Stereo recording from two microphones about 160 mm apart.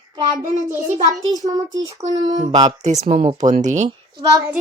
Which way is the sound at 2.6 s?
45° right (ahead or behind).